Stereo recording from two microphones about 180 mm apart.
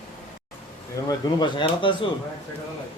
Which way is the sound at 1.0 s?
25° left (ahead or behind).